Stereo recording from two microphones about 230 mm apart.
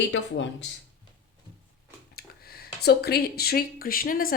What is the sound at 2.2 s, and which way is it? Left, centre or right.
Speech, left.